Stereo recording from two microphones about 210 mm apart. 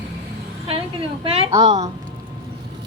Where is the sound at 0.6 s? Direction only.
25° right (ahead or behind).